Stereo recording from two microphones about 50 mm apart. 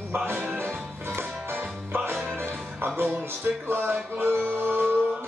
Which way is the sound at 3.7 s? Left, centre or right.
Right.